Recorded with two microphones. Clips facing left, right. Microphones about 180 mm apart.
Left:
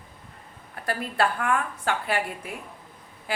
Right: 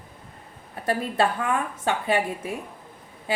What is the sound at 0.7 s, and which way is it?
A woman's voice, 25° right (ahead or behind).